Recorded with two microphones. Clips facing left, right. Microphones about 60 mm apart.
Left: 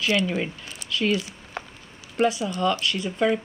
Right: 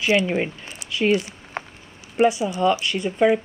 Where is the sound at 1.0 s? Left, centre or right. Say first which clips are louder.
Right 5 dB; right.